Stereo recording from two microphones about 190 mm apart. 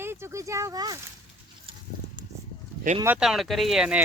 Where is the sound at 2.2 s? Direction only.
20° right (ahead or behind).